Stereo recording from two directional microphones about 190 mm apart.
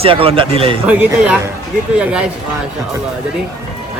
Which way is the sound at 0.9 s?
10° right (ahead or behind).